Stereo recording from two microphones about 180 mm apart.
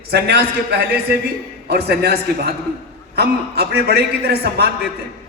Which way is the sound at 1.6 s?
65° right (ahead or behind).